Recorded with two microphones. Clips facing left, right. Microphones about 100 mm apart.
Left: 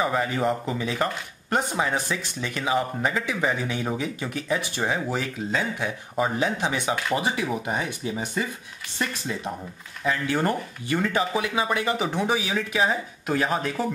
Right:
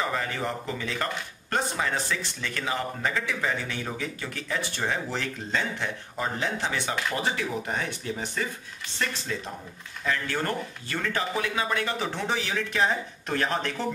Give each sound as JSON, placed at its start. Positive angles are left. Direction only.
{"t": 0.0, "sound": "speech", "side_deg": 15}